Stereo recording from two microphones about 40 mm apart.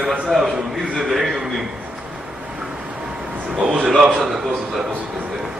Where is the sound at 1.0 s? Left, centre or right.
Centre.